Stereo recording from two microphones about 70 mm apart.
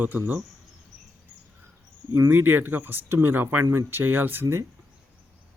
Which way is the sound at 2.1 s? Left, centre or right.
Right.